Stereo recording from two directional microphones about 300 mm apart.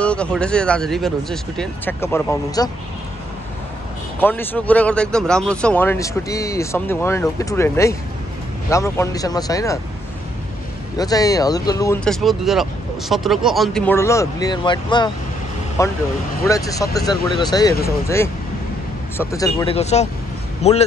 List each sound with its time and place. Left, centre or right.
0.0 s speech: centre
4.2 s a man's voice: centre
11.0 s a man's voice: centre